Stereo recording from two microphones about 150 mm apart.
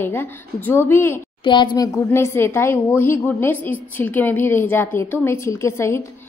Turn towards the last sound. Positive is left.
turn(degrees=20)  # may be behind; listen again after turning